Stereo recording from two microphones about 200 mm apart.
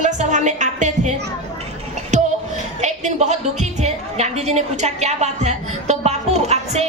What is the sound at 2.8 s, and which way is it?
A child's voice, 35° right (ahead or behind).